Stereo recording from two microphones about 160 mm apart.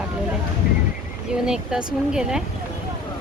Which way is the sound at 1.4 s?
5° right (ahead or behind).